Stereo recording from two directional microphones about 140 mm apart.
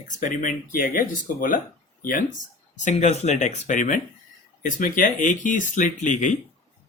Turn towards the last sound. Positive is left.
turn(degrees=60)  # may be behind; listen again after turning